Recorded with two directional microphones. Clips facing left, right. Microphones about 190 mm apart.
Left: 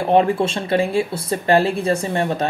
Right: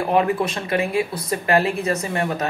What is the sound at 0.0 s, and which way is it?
Speech, 30° left (ahead or behind).